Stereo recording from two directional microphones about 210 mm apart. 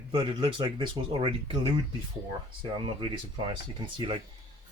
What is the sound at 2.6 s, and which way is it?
Speech, 25° right (ahead or behind).